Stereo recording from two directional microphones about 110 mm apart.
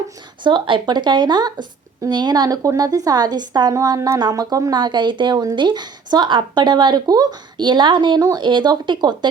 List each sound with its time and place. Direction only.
0.4 s speech: 45° right (ahead or behind)